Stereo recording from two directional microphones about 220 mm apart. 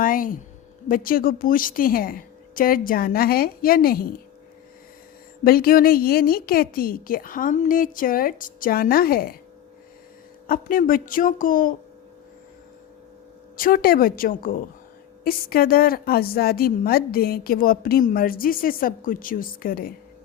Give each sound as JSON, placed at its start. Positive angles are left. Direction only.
{"t": 0.0, "sound": "a woman's voice", "side_deg": 40}
{"t": 5.4, "sound": "a woman's voice", "side_deg": 40}
{"t": 10.4, "sound": "a woman's voice", "side_deg": 40}
{"t": 13.6, "sound": "a woman's voice", "side_deg": 40}